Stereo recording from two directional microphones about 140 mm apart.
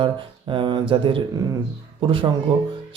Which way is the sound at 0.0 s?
35° right (ahead or behind).